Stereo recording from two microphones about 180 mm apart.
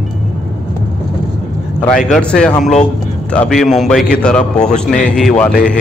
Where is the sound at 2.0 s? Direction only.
5° left (ahead or behind).